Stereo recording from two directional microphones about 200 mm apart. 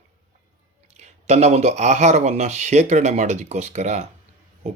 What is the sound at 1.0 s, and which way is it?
Speech, 35° right (ahead or behind).